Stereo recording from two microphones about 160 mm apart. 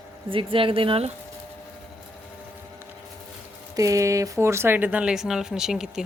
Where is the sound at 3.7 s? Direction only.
20° right (ahead or behind).